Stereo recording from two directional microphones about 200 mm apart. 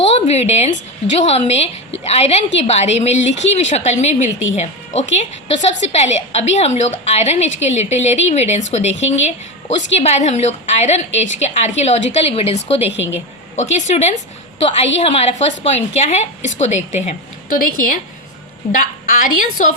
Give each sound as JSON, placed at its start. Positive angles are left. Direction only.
{"t": 0.0, "sound": "a sound", "side_deg": 30}
{"t": 1.1, "sound": "a woman's voice", "side_deg": 35}
{"t": 18.7, "sound": "a woman's voice", "side_deg": 40}